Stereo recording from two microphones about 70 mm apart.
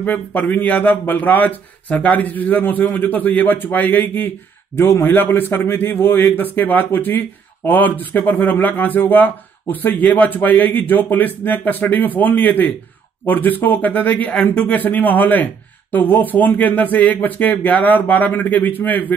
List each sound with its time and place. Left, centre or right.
0.0 s a man's voice: left